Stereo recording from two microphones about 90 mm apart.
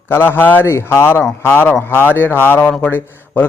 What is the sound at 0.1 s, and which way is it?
A man's voice, 25° left (ahead or behind).